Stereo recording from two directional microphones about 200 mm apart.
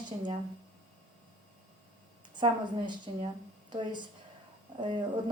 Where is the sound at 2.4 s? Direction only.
25° right (ahead or behind).